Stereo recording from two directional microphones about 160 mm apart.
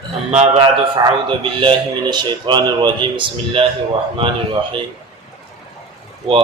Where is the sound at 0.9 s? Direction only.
30° right (ahead or behind).